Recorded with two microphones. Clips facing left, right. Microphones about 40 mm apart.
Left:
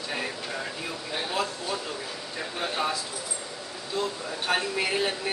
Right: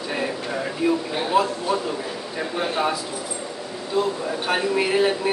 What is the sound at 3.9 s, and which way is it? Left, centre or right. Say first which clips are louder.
A man's voice: right 7 dB; centre.